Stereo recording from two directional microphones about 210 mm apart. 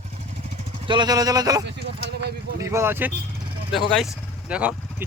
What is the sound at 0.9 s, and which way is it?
Speech, 20° right (ahead or behind).